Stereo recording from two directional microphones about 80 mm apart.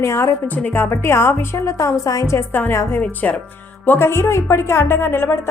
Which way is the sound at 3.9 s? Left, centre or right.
Left.